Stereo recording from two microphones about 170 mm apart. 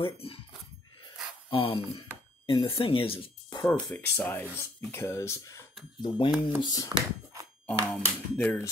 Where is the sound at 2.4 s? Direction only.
35° left (ahead or behind).